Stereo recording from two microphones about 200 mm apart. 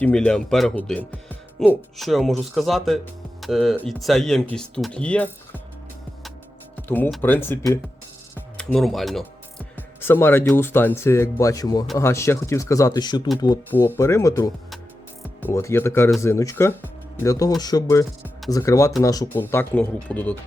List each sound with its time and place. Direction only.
0.0 s speech: 5° left (ahead or behind)
6.7 s speech: 10° left (ahead or behind)
13.7 s speech: 10° left (ahead or behind)